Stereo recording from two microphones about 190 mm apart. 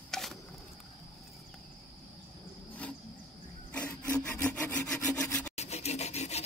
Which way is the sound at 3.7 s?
10° left (ahead or behind).